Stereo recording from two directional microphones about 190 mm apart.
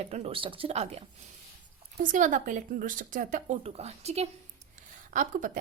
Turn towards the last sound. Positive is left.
turn(degrees=-45)  # may be behind; listen again after turning